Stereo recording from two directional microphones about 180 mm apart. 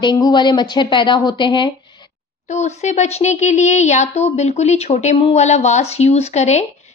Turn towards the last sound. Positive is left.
turn(degrees=40)  # may be behind; listen again after turning